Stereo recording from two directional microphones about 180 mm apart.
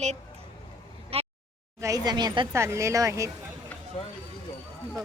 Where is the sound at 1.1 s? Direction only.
35° right (ahead or behind).